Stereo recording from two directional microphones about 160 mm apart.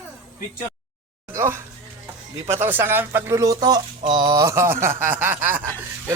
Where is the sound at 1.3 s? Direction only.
15° right (ahead or behind).